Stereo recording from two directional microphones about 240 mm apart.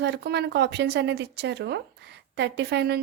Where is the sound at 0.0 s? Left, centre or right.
Right.